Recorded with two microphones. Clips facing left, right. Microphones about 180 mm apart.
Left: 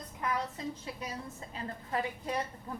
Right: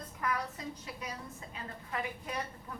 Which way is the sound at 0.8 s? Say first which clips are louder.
Left 3 dB; 30° left (ahead or behind).